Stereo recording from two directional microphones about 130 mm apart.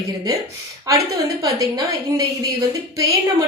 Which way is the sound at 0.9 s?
25° right (ahead or behind).